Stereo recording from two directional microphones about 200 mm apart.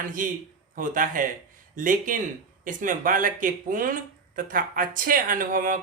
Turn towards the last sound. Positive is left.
turn(degrees=-45)  # may be behind; listen again after turning